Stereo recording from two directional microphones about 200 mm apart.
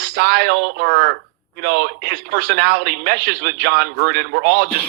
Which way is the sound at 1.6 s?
55° right (ahead or behind).